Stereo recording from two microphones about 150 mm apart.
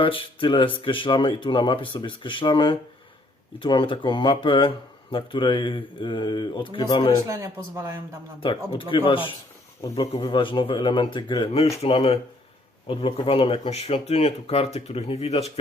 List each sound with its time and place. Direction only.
0.0 s speech: 35° left (ahead or behind)
7.3 s speech: 20° right (ahead or behind)
8.4 s speech: 35° left (ahead or behind)